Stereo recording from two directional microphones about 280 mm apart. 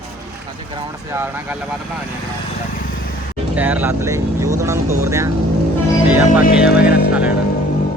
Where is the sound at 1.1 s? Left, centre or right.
Centre.